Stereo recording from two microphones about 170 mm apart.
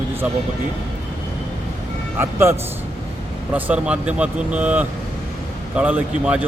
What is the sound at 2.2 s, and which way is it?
A man's voice, 15° right (ahead or behind).